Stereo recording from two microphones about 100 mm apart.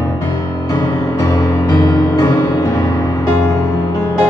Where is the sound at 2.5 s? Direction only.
40° left (ahead or behind).